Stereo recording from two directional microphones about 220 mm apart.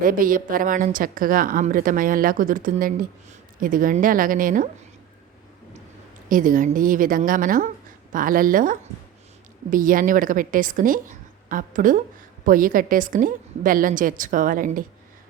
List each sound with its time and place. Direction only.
0.0 s a woman's voice: 40° right (ahead or behind)
6.2 s a woman's voice: 35° right (ahead or behind)